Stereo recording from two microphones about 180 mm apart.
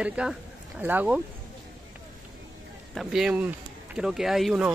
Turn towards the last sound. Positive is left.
turn(degrees=-5)  # may be behind; listen again after turning